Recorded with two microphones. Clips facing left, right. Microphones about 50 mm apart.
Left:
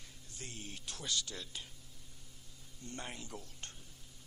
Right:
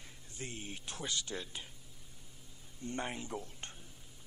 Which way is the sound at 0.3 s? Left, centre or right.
Right.